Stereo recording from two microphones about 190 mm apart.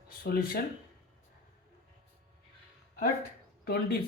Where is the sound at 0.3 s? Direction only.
50° left (ahead or behind).